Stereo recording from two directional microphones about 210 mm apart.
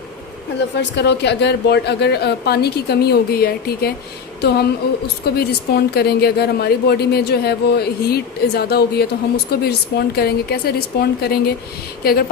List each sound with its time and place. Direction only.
0.8 s a woman's voice: 55° left (ahead or behind)